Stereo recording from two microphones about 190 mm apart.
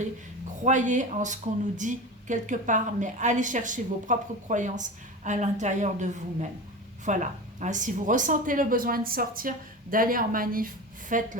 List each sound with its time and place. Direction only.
0.6 s a woman's voice: 40° right (ahead or behind)